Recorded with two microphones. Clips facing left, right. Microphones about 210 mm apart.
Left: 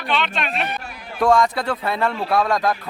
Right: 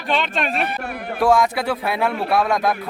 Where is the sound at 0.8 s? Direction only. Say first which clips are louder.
Right 8 dB; 60° right (ahead or behind).